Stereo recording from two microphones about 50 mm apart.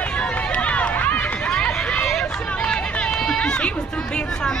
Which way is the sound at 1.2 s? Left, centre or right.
Left.